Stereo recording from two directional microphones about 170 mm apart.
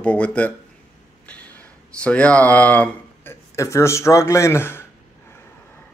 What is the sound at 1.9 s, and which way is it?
Speech, 5° left (ahead or behind).